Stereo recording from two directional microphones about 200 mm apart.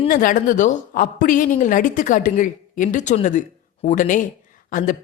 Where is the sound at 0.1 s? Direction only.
45° left (ahead or behind).